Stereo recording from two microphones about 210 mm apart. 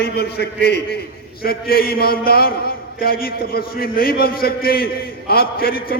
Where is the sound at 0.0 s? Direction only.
50° left (ahead or behind).